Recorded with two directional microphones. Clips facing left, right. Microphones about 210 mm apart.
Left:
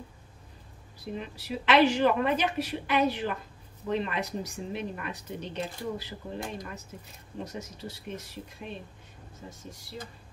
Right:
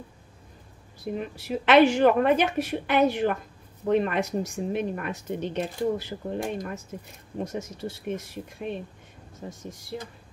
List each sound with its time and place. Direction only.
1.1 s speech: 50° right (ahead or behind)
8.6 s speech: 60° right (ahead or behind)